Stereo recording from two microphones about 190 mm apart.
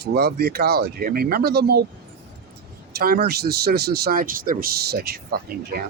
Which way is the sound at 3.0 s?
55° right (ahead or behind).